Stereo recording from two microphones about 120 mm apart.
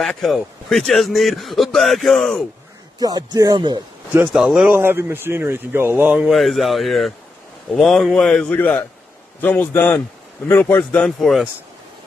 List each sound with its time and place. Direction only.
0.0 s a man's voice: centre (ahead or behind)
3.0 s speech: 30° right (ahead or behind)
4.3 s a man's voice: 5° right (ahead or behind)
4.6 s speech: 20° right (ahead or behind)
6.1 s a man's voice: centre (ahead or behind); by 10.8 s 15° left (ahead or behind)
10.9 s a man's voice: 5° left (ahead or behind)